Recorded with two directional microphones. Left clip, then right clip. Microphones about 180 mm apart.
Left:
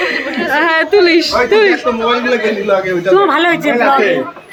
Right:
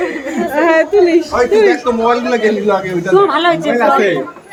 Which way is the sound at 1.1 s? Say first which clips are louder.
Left 1 dB; 5° left (ahead or behind).